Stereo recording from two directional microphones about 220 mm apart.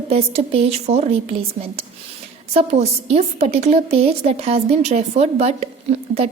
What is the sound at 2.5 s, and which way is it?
A woman's voice, 30° right (ahead or behind).